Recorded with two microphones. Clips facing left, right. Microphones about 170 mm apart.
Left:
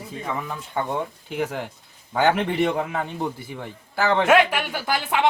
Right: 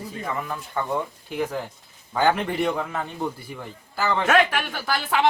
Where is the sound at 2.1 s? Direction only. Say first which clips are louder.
Left 2 dB; 20° left (ahead or behind).